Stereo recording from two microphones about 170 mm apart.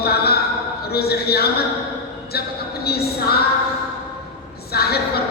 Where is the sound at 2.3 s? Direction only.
70° left (ahead or behind).